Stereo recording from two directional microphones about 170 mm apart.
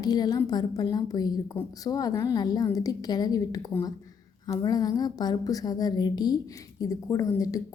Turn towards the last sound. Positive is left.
turn(degrees=20)  # may be behind; listen again after turning